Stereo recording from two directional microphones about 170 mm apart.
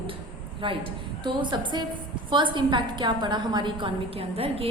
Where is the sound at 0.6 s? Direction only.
30° right (ahead or behind).